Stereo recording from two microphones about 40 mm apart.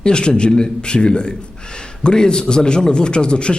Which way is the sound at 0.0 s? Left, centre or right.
Left.